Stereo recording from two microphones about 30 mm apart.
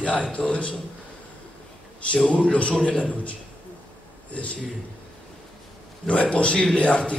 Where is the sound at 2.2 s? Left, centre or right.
Left.